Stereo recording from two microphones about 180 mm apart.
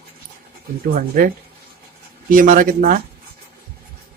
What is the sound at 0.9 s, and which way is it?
Speech, 50° right (ahead or behind).